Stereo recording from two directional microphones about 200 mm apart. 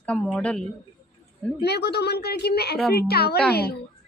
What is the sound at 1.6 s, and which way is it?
A woman's voice, 55° left (ahead or behind).